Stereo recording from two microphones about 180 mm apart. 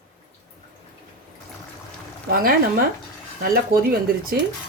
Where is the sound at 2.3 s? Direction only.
55° right (ahead or behind).